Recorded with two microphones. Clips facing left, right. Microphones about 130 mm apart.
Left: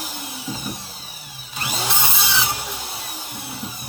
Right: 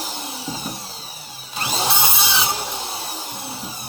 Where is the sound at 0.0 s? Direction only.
30° right (ahead or behind).